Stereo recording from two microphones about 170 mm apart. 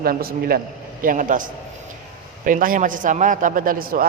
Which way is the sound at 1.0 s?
50° right (ahead or behind).